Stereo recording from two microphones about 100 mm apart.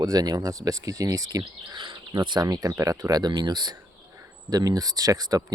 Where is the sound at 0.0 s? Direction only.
40° right (ahead or behind).